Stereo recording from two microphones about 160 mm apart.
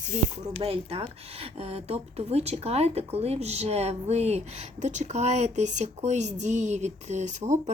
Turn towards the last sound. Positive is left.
turn(degrees=-50)  # may be behind; listen again after turning